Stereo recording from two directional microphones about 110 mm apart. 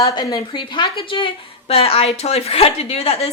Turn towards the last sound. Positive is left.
turn(degrees=65)  # may be behind; listen again after turning